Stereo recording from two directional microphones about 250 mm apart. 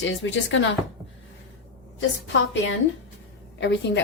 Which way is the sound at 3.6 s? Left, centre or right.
Left.